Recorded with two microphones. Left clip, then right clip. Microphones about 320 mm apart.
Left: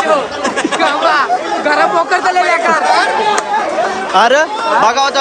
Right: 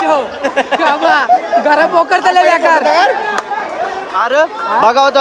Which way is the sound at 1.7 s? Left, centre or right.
Right.